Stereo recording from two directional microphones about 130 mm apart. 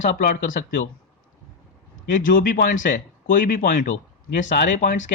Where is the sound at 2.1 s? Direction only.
90° left.